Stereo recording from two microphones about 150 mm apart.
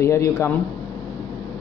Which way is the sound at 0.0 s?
20° left (ahead or behind).